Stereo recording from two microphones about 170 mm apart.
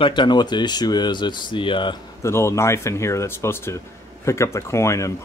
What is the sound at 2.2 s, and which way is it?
Speech, 15° left (ahead or behind).